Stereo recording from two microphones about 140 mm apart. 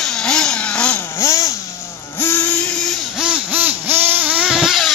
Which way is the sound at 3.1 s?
5° right (ahead or behind).